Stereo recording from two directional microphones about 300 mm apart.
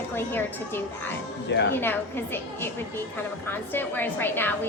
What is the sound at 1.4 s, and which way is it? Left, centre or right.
Speech, left.